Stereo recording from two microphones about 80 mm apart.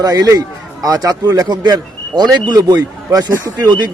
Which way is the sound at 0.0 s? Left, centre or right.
Right.